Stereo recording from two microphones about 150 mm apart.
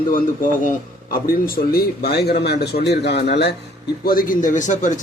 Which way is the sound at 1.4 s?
85° left.